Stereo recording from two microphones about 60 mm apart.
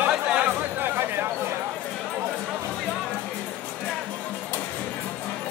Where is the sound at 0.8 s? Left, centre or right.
Right.